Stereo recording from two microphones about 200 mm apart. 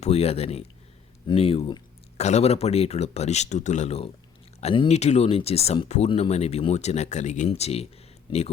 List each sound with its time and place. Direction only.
0.0 s speech: 30° left (ahead or behind)